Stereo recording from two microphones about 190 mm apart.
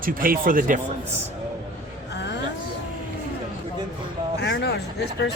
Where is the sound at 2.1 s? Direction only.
65° left (ahead or behind).